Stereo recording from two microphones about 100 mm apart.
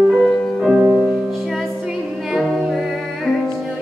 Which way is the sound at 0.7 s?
15° right (ahead or behind).